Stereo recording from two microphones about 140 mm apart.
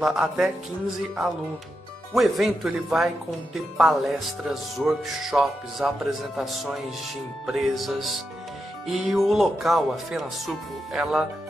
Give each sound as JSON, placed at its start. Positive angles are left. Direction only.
{"t": 0.0, "sound": "speech", "side_deg": -5}
{"t": 2.1, "sound": "speech", "side_deg": 0}